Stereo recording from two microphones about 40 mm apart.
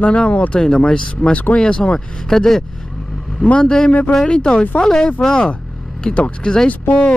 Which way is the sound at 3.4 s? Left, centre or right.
Left.